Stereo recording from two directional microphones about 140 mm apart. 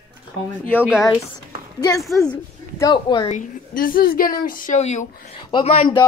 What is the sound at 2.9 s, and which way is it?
Speech, 35° left (ahead or behind).